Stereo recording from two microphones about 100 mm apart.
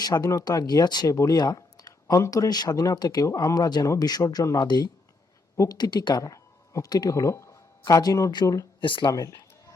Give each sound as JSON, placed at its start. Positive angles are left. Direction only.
{"t": 0.0, "sound": "speech", "side_deg": 35}
{"t": 1.0, "sound": "speech", "side_deg": 30}
{"t": 8.8, "sound": "speech", "side_deg": 55}
{"t": 9.1, "sound": "speech", "side_deg": 35}